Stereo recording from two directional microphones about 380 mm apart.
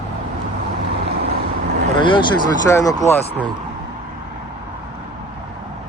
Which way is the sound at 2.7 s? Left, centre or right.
Centre.